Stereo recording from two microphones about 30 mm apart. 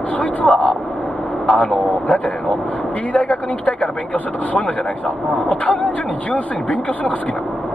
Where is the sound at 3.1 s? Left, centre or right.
Left.